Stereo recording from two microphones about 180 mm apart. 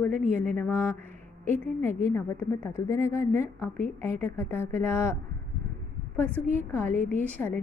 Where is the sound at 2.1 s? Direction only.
15° left (ahead or behind).